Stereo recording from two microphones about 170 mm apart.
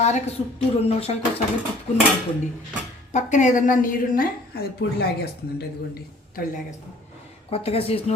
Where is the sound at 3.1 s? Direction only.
45° left (ahead or behind); by 6.4 s 70° left (ahead or behind).